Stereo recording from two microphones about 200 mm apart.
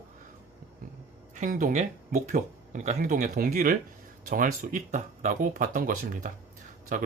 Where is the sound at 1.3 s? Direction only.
40° right (ahead or behind).